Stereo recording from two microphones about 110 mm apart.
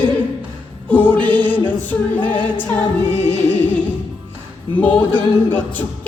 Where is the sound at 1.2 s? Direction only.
15° left (ahead or behind).